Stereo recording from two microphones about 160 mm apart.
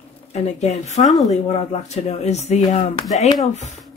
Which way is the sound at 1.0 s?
Centre (ahead or behind).